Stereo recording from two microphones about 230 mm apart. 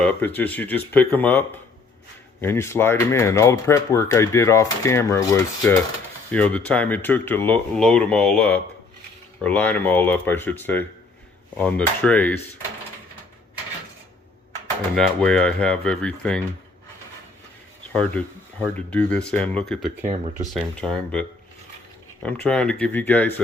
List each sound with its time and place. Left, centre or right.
0.0 s speech: centre
14.9 s speech: centre
17.9 s speech: centre